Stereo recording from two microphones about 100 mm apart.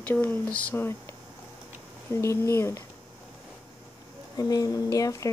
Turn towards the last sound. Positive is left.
turn(degrees=35)  # may be behind; listen again after turning